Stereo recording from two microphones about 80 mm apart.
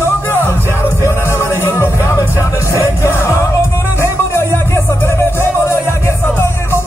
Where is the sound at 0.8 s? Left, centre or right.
Left.